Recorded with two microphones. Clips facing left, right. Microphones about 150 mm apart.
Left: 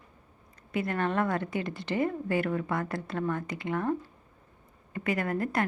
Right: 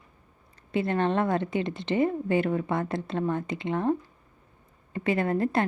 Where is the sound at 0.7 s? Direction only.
25° right (ahead or behind).